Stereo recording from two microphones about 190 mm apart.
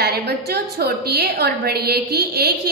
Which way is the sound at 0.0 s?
60° right (ahead or behind).